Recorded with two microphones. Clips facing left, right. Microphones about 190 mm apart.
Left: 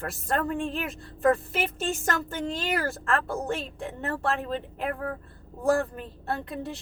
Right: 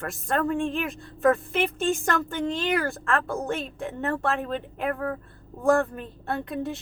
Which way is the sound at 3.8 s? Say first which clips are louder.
Right 3 dB; 35° left (ahead or behind).